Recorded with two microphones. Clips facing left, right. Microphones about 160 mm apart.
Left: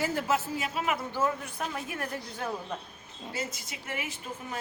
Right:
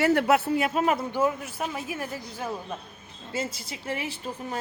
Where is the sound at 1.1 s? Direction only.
10° right (ahead or behind).